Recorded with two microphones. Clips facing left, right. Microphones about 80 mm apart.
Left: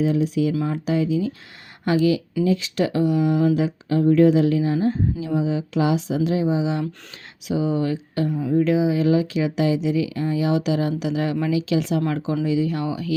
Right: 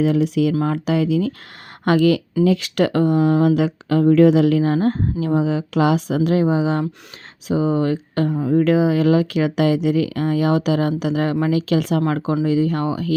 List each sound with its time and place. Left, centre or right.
0.0 s speech: right
0.6 s speech: right
1.8 s speech: right
2.4 s speech: right